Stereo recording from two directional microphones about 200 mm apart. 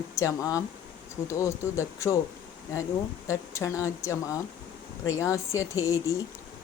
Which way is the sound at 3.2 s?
15° left (ahead or behind).